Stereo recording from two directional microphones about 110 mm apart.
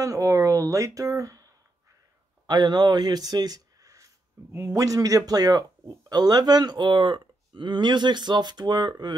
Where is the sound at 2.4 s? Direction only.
40° right (ahead or behind).